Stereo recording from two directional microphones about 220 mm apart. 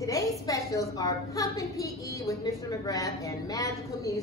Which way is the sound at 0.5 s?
15° left (ahead or behind).